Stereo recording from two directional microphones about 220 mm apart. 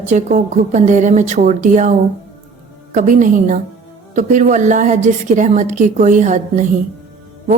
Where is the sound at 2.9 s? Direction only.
35° right (ahead or behind).